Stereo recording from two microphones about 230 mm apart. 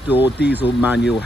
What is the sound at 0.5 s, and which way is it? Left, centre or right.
Speech, centre.